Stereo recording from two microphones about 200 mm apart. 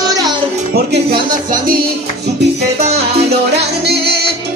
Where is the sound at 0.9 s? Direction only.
45° right (ahead or behind).